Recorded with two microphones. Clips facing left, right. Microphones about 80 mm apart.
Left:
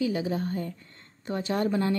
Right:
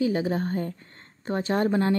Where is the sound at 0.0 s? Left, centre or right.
Right.